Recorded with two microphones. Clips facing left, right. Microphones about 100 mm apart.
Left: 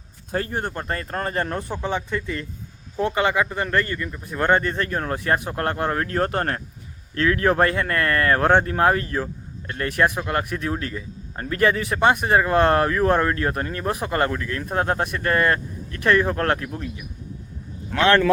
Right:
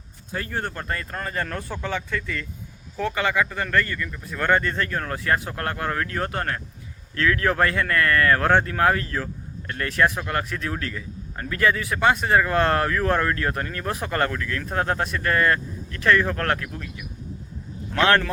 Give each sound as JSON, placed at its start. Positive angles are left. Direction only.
{"t": 0.3, "sound": "speech", "side_deg": 40}
{"t": 0.5, "sound": "speech", "side_deg": 20}
{"t": 7.2, "sound": "speech", "side_deg": 25}